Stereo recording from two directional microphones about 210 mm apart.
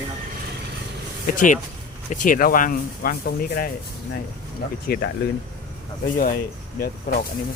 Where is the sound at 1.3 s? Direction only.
40° left (ahead or behind).